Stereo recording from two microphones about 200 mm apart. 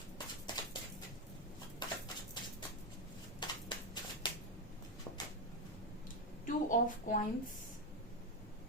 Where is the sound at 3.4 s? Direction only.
20° left (ahead or behind).